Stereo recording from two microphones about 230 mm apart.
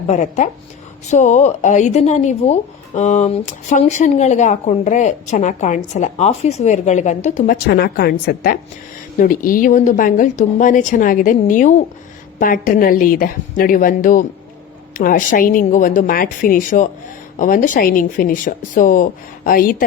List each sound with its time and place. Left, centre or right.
0.1 s speech: left